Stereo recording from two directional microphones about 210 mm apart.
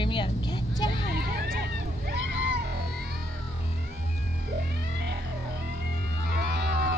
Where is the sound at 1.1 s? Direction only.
50° right (ahead or behind).